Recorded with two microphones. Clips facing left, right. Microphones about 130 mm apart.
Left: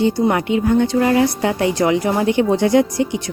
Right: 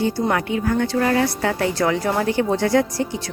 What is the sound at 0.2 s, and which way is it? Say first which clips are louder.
A woman's voice: left 4 dB; 20° left (ahead or behind).